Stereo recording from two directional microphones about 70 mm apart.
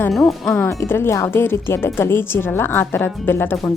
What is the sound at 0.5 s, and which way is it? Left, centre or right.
A woman's voice, left.